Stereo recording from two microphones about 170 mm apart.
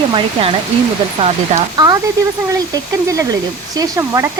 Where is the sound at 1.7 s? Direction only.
20° right (ahead or behind).